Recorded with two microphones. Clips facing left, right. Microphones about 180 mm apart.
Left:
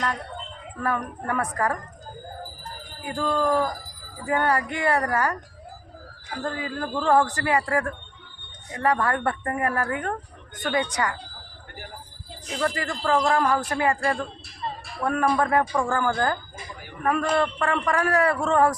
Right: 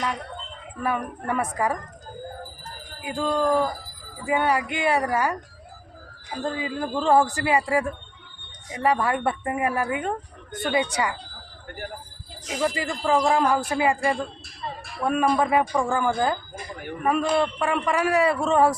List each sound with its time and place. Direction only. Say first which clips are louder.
0.8 s a man's voice: even; 15° right (ahead or behind)
3.0 s a man's voice: right 1 dB; 15° right (ahead or behind)
6.3 s a man's voice: right 2 dB; 20° right (ahead or behind)
10.6 s a man's voice: right 1 dB; 10° right (ahead or behind)
12.5 s a man's voice: right 1 dB; 15° right (ahead or behind)